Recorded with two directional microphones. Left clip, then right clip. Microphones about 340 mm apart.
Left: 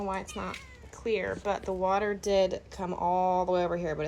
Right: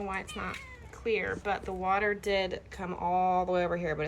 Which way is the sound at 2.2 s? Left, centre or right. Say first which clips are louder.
Left 4 dB; left.